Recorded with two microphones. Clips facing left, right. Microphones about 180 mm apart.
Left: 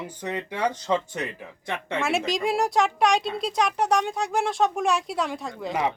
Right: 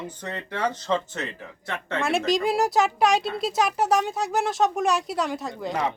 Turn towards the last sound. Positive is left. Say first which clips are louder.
# even
turn(degrees=0)  # may be behind; listen again after turning